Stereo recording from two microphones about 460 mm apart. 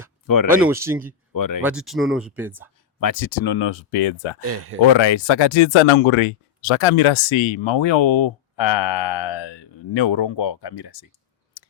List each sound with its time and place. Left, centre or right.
0.6 s speech: centre
1.3 s speech: left
1.6 s speech: centre
3.0 s speech: left
4.4 s speech: right
4.9 s speech: left